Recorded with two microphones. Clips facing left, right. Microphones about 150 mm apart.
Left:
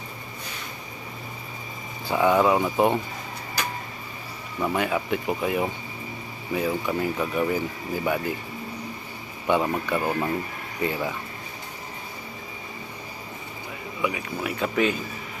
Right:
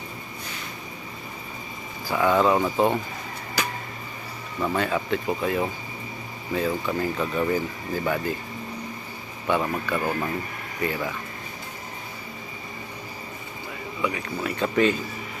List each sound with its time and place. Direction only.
2.0 s speech: 20° left (ahead or behind)
4.6 s speech: 10° left (ahead or behind)
9.5 s speech: 20° left (ahead or behind)
14.0 s speech: 15° left (ahead or behind)